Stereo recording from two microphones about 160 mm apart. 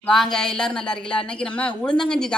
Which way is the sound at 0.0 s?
5° left (ahead or behind).